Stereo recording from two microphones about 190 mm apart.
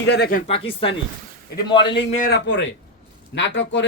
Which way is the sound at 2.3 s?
75° left (ahead or behind).